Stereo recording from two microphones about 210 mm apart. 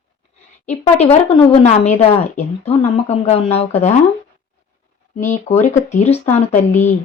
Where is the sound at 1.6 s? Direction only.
30° left (ahead or behind).